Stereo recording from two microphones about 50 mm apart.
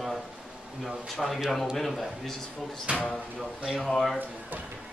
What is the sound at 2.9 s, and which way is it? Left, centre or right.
Speech, right.